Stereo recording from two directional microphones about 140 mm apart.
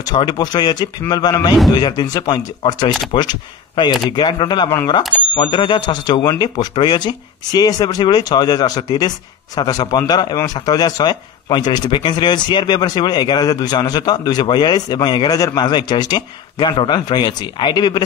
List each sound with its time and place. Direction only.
0.1 s a man's voice: 30° left (ahead or behind)